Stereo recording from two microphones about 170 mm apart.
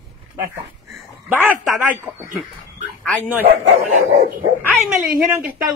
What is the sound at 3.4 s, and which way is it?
Speech, 40° right (ahead or behind).